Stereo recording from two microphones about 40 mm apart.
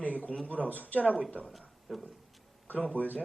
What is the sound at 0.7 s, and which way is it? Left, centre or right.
Speech, left.